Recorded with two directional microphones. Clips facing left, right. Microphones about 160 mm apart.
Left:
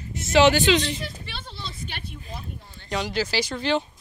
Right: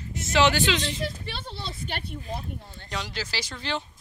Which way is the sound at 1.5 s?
60° right (ahead or behind).